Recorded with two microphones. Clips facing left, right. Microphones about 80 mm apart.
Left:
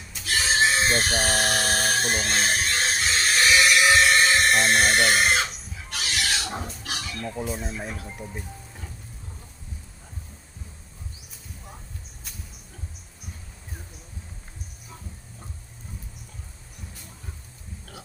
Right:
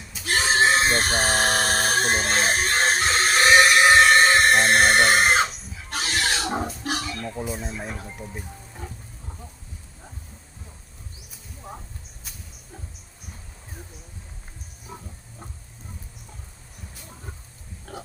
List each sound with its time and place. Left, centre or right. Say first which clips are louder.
0.3 s chicken: right 3 dB; right
5.5 s chicken: right 1 dB; centre
5.9 s chicken: right 3 dB; right
7.0 s speech: right 1 dB; centre